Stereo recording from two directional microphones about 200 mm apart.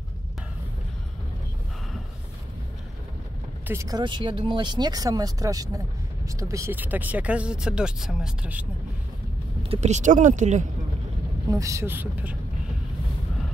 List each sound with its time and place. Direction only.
3.6 s speech: 15° right (ahead or behind)
9.6 s speech: 30° right (ahead or behind)
11.5 s speech: 15° right (ahead or behind)